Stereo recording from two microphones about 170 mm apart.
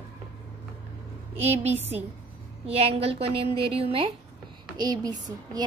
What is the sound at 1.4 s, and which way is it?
Speech, 40° right (ahead or behind).